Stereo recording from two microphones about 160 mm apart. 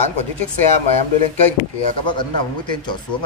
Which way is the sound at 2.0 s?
30° left (ahead or behind).